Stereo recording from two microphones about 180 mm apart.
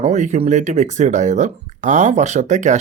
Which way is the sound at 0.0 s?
40° right (ahead or behind).